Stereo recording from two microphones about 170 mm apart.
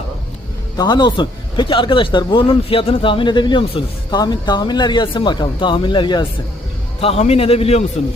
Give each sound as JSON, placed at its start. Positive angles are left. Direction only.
{"t": 0.8, "sound": "a man's voice", "side_deg": 25}